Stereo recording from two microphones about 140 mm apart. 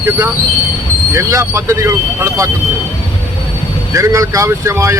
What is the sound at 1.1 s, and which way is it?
Speech, 25° right (ahead or behind).